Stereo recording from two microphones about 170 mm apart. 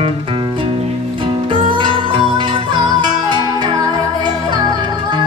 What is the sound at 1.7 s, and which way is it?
Music, 30° right (ahead or behind).